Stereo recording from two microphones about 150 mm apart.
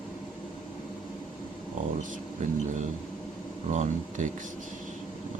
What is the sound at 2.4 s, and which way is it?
Speech, 60° right (ahead or behind).